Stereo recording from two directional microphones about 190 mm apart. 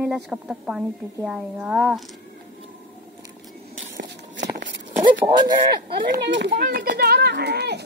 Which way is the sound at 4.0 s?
70° right (ahead or behind).